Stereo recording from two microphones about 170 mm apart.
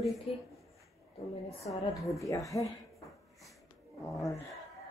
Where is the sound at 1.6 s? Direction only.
20° left (ahead or behind).